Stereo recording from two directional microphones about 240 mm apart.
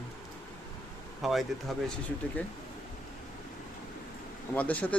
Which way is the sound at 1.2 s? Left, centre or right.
Centre.